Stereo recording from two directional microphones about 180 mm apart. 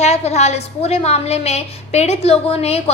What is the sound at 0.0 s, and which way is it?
A woman's voice, 35° left (ahead or behind).